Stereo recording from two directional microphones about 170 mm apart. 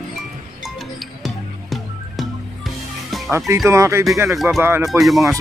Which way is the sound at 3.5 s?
15° right (ahead or behind).